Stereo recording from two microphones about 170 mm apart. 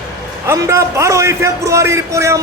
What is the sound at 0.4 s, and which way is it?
A man's voice, 15° right (ahead or behind).